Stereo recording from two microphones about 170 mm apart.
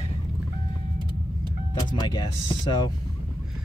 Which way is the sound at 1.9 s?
25° left (ahead or behind).